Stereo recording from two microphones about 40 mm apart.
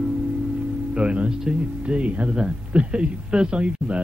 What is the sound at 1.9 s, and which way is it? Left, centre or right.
A man's voice, right.